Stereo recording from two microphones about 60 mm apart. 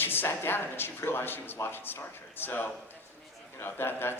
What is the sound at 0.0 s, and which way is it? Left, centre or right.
A man's voice, left.